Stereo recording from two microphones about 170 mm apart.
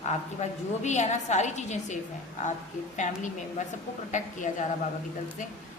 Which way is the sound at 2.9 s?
45° left (ahead or behind).